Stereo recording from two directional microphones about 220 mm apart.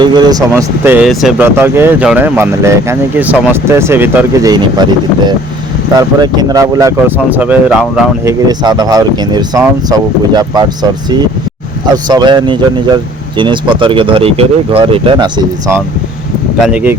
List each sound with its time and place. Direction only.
0.0 s speech: 20° right (ahead or behind)
12.0 s speech: 20° right (ahead or behind)
16.6 s speech: 5° right (ahead or behind)